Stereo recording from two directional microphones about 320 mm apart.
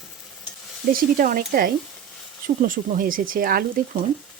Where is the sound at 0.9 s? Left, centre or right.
Right.